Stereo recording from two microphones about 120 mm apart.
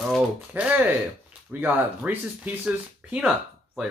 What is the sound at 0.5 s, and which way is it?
Speech, 10° right (ahead or behind).